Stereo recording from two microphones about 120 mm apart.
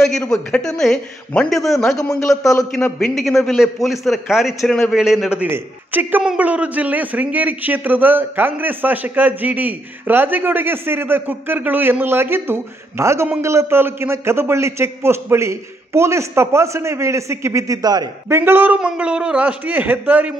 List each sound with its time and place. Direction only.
0.0 s a man's voice: 5° left (ahead or behind)
5.4 s a man's voice: 15° right (ahead or behind); by 18.1 s 35° right (ahead or behind)
18.3 s speech: 15° right (ahead or behind)